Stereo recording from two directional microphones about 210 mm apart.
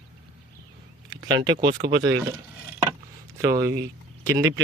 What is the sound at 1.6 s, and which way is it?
Speech, 20° right (ahead or behind).